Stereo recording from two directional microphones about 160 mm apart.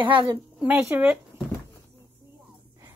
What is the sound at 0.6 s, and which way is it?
Speech, 10° right (ahead or behind).